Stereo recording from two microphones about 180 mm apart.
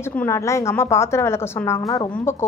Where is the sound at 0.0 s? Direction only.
10° left (ahead or behind).